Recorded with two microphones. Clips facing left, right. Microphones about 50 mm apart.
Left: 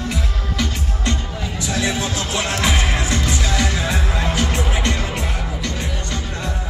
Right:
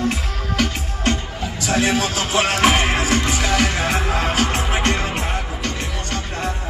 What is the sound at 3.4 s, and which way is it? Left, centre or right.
Music, right.